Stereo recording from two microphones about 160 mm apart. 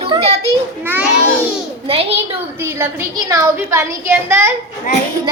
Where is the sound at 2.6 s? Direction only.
15° right (ahead or behind).